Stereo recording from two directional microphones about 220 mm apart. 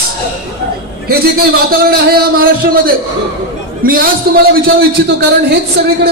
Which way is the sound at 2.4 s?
40° right (ahead or behind).